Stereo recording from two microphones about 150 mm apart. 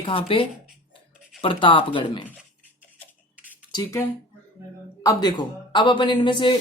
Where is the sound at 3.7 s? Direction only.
20° left (ahead or behind).